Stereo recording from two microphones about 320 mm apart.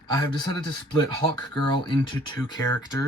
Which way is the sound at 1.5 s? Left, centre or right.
Centre.